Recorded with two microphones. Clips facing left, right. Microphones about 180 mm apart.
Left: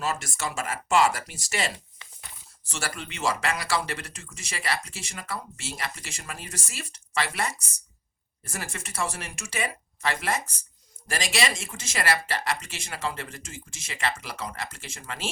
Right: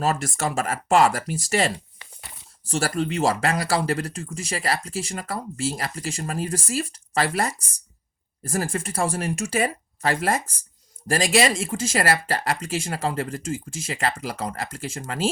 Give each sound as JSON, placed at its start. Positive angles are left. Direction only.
{"t": 0.0, "sound": "speech", "side_deg": -35}
{"t": 8.4, "sound": "speech", "side_deg": -30}